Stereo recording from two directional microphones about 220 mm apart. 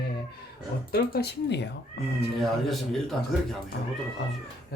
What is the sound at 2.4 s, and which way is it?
A man's voice, centre (ahead or behind).